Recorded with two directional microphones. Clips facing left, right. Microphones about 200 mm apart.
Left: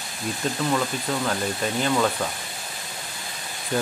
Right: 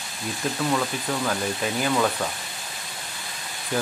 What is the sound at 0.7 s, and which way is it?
Speech, centre (ahead or behind).